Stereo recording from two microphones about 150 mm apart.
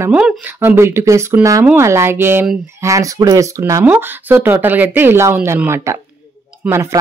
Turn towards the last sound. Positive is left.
turn(degrees=-20)  # may be behind; listen again after turning